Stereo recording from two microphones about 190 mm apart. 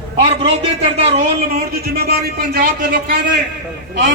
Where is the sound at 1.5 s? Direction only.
55° right (ahead or behind).